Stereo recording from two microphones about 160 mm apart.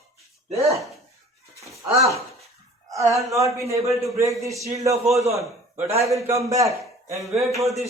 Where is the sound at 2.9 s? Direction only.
20° right (ahead or behind).